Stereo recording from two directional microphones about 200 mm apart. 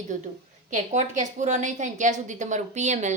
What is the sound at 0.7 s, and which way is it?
Speech, 35° right (ahead or behind).